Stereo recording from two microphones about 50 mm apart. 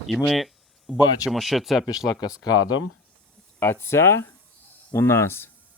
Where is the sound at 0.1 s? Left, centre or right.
Centre.